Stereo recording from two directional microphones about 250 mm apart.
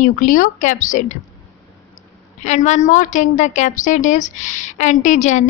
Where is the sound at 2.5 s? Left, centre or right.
Left.